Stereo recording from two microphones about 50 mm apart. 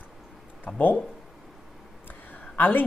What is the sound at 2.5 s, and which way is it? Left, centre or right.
Speech, left.